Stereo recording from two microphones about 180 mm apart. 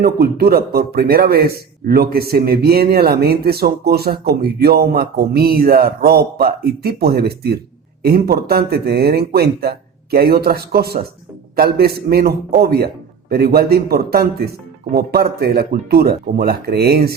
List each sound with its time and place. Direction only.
0.0 s a man's voice: 60° right (ahead or behind)